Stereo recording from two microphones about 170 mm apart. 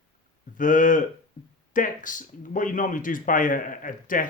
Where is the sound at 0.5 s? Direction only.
50° left (ahead or behind).